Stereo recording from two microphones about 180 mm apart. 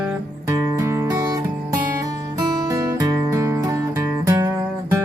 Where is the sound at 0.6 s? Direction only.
15° right (ahead or behind).